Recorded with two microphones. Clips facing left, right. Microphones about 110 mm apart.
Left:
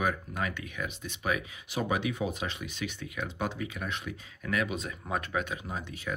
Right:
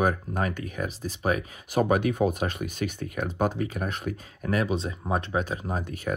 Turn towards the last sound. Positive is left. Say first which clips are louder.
# right 6 dB
turn(degrees=-45)  # may be behind; listen again after turning